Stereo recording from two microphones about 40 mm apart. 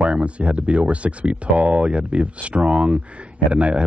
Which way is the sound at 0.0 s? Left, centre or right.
Right.